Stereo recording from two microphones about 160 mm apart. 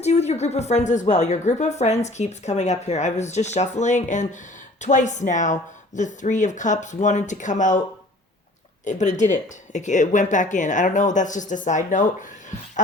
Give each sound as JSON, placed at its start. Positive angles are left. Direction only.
{"t": 0.0, "sound": "speech", "side_deg": 45}
{"t": 8.8, "sound": "speech", "side_deg": 50}